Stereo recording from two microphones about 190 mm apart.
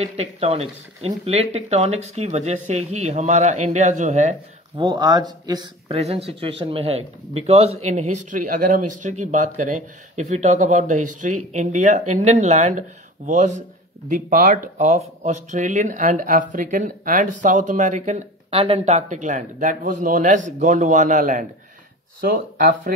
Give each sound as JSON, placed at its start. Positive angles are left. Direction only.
{"t": 0.0, "sound": "speech", "side_deg": -35}
{"t": 4.7, "sound": "speech", "side_deg": -25}
{"t": 14.0, "sound": "speech", "side_deg": -45}
{"t": 22.2, "sound": "speech", "side_deg": -55}